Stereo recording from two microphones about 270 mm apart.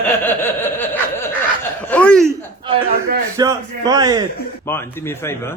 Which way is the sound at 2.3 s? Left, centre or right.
Centre.